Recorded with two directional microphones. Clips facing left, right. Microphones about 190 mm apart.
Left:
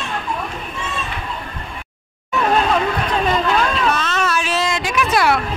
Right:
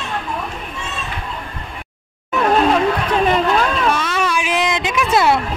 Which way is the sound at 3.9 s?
10° right (ahead or behind).